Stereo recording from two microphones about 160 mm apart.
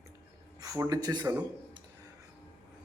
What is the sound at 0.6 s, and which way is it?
Speech, 20° right (ahead or behind).